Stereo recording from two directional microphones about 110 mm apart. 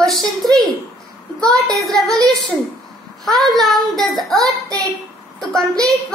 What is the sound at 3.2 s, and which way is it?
Speech, centre (ahead or behind).